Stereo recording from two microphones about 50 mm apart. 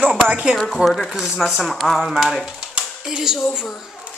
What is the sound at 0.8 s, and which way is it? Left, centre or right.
Speech, centre.